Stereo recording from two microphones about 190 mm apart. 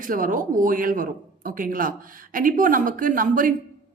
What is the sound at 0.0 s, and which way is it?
A woman's voice, 45° right (ahead or behind).